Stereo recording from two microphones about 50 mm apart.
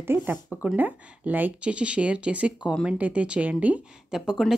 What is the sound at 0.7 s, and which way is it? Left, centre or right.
Speech, right.